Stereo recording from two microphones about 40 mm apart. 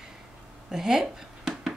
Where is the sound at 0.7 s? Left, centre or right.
Centre.